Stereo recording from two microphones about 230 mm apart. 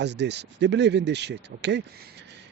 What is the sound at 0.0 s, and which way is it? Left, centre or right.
Speech, right.